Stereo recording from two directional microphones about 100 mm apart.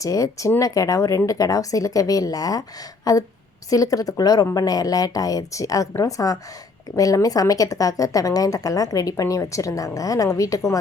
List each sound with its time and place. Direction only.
0.0 s a woman's voice: 35° left (ahead or behind)